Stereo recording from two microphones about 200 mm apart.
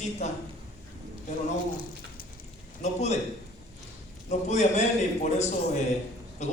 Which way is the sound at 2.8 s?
35° left (ahead or behind).